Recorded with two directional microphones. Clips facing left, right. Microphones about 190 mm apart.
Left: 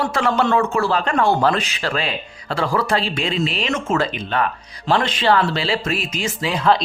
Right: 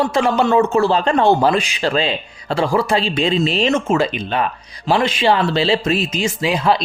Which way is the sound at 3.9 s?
15° right (ahead or behind).